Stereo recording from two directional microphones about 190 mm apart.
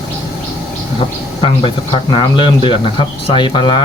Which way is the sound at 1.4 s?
30° left (ahead or behind).